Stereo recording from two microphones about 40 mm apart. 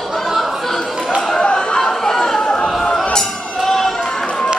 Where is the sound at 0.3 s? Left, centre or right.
Centre.